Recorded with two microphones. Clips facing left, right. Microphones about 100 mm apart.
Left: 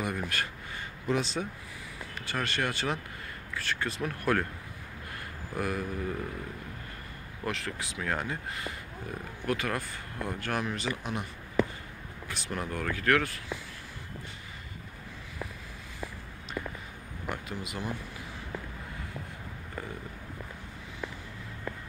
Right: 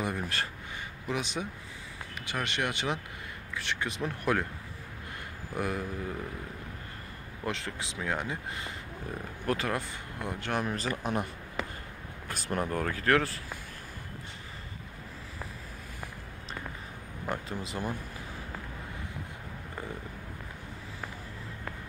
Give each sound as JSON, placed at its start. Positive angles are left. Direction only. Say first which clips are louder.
{"t": 0.0, "sound": "speech", "louder": "even", "side_deg": -25}
{"t": 1.0, "sound": "speech", "louder": "left 4 dB", "side_deg": -15}
{"t": 5.5, "sound": "speech", "louder": "even", "side_deg": -20}
{"t": 7.4, "sound": "speech", "louder": "even", "side_deg": -25}
{"t": 9.5, "sound": "speech", "louder": "right 1 dB", "side_deg": -25}
{"t": 10.7, "sound": "speech", "louder": "right 2 dB", "side_deg": -40}
{"t": 12.3, "sound": "speech", "louder": "right 4 dB", "side_deg": -45}
{"t": 17.3, "sound": "speech", "louder": "right 2 dB", "side_deg": -35}